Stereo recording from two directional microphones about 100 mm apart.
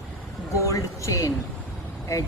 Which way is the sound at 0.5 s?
30° left (ahead or behind).